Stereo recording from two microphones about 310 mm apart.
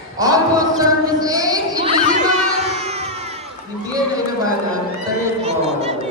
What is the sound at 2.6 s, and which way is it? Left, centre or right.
Music, right.